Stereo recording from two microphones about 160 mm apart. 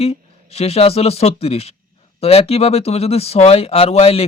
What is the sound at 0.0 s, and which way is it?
Speech, 40° left (ahead or behind).